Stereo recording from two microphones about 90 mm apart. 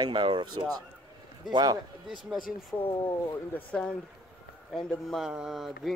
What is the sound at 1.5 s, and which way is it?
Speech, 50° right (ahead or behind).